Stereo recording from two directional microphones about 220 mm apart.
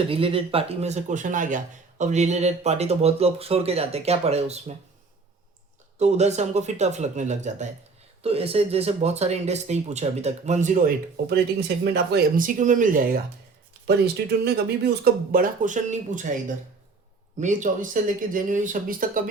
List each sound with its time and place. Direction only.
0.1 s speech: 25° right (ahead or behind)
6.0 s speech: 30° right (ahead or behind)
13.8 s speech: 45° right (ahead or behind)
17.4 s speech: 35° right (ahead or behind)